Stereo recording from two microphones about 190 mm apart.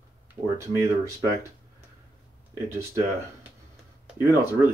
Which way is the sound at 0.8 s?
15° right (ahead or behind).